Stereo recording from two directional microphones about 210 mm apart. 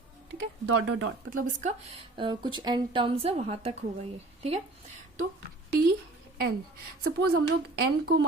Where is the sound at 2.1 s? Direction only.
20° right (ahead or behind).